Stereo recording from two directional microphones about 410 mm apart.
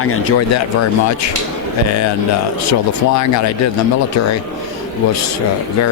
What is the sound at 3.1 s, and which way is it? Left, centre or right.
Speech, left.